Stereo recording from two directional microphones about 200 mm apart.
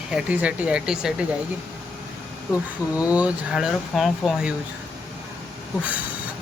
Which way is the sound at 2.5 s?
5° right (ahead or behind).